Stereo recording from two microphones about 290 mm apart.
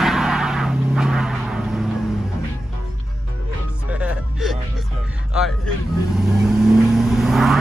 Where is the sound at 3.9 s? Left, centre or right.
Centre.